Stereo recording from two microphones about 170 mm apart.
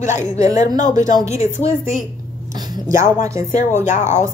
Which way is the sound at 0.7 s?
50° left (ahead or behind).